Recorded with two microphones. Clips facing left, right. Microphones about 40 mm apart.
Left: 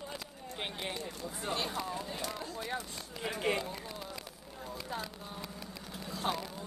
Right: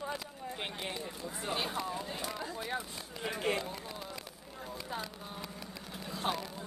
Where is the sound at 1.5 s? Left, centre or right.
Centre.